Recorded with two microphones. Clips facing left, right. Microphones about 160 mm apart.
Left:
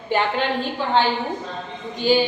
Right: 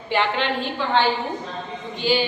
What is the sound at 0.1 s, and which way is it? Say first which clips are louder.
Speech: left 1 dB; 45° left (ahead or behind).